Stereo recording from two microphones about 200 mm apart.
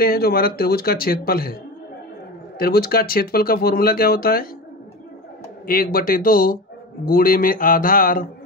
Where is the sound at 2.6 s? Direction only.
50° left (ahead or behind).